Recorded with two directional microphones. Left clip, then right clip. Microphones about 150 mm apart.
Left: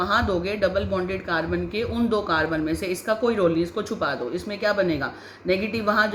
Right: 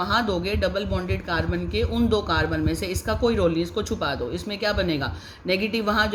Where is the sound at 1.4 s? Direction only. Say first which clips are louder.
Left 1 dB; 70° right (ahead or behind).